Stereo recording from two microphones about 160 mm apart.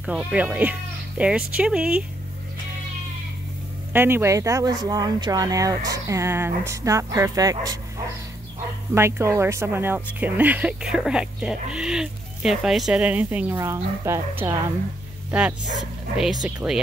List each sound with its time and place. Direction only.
0.0 s speech: 5° right (ahead or behind)
3.9 s speech: 15° right (ahead or behind)
8.9 s a woman's voice: 15° right (ahead or behind)
16.6 s speech: 5° right (ahead or behind)